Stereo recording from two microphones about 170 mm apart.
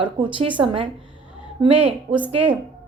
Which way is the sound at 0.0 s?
30° right (ahead or behind).